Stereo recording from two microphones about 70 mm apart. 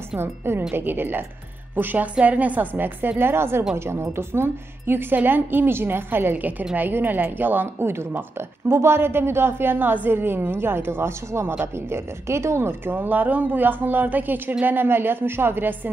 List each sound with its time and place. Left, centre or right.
0.2 s a woman's voice: right